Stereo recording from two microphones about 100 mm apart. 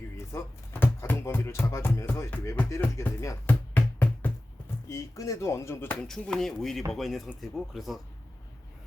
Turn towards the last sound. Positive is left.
turn(degrees=0)  # may be behind; listen again after turning